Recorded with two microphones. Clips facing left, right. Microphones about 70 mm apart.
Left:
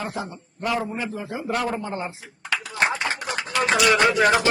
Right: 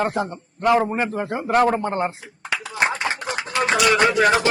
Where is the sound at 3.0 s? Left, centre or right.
Right.